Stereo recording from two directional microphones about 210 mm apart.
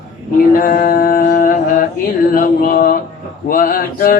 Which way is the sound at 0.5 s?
40° left (ahead or behind).